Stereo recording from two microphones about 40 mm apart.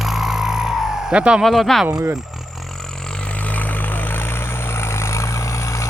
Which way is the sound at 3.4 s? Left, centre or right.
Left.